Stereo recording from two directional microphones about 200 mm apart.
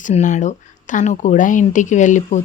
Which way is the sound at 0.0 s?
35° left (ahead or behind).